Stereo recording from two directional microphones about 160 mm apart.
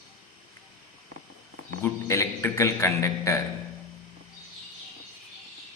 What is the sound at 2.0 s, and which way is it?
A man's voice, 20° left (ahead or behind).